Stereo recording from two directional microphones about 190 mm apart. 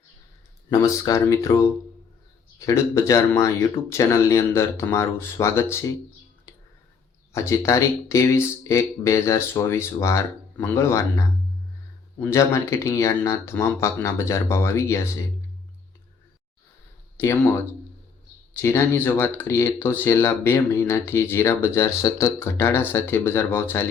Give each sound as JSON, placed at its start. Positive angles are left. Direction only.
{"t": 0.7, "sound": "speech", "side_deg": 15}
{"t": 7.3, "sound": "speech", "side_deg": 15}
{"t": 12.2, "sound": "speech", "side_deg": 15}
{"t": 17.2, "sound": "speech", "side_deg": 15}